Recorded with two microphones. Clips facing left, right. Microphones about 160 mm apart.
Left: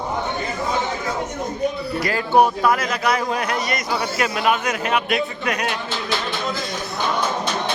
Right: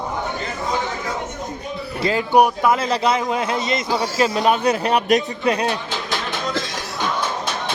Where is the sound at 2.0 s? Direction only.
20° right (ahead or behind).